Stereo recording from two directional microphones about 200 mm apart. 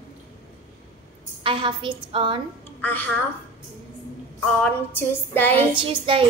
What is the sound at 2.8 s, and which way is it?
Speech, 10° left (ahead or behind).